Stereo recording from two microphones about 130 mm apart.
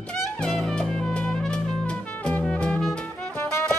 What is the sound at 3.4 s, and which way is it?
Music, 20° left (ahead or behind).